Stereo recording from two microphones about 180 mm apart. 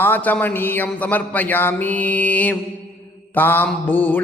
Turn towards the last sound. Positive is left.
turn(degrees=10)  # may be behind; listen again after turning